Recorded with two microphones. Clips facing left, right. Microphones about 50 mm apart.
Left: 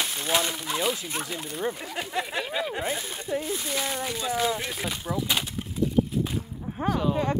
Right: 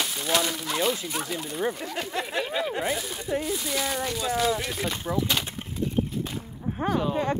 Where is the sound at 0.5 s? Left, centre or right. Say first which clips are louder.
Right 1 dB; centre.